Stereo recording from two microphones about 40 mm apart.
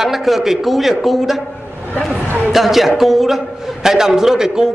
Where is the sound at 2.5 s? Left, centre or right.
Centre.